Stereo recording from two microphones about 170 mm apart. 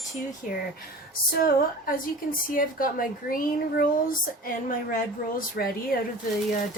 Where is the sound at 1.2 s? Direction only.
60° left (ahead or behind).